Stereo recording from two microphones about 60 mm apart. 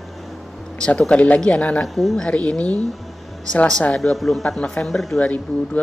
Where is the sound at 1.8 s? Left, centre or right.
Centre.